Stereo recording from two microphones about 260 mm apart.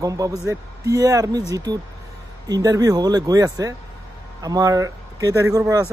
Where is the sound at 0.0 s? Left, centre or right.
Centre.